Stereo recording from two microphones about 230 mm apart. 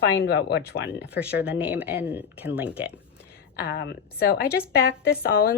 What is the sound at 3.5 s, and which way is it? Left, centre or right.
A woman's voice, left.